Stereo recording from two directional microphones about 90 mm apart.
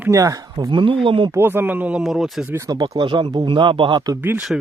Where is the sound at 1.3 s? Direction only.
25° right (ahead or behind).